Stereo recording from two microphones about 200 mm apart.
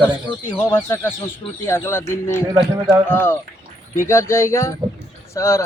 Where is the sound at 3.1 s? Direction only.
10° left (ahead or behind).